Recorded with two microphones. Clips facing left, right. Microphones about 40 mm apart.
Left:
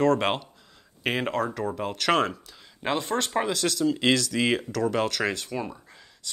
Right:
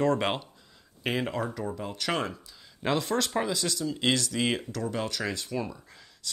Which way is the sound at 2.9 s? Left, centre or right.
Left.